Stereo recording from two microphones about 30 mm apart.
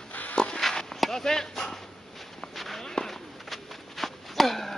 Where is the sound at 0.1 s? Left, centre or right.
Left.